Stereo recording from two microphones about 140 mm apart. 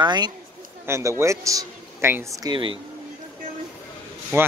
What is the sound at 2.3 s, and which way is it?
Speech, 30° right (ahead or behind).